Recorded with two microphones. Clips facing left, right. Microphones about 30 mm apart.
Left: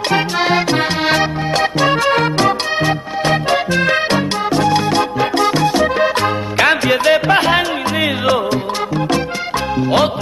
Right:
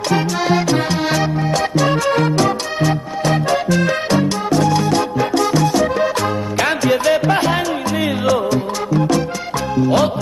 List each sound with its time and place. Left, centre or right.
0.1 s music: left
9.8 s music: left